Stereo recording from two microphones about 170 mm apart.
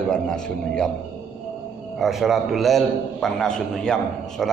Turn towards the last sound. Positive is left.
turn(degrees=5)  # may be behind; listen again after turning